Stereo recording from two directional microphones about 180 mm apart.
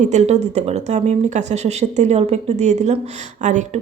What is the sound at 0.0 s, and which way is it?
A woman's voice, 40° right (ahead or behind).